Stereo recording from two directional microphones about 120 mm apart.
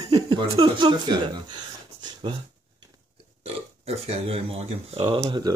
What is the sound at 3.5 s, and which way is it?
Speech, 60° right (ahead or behind).